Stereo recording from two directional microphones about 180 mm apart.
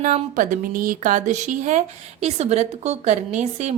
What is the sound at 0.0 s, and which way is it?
A woman's voice, 45° right (ahead or behind).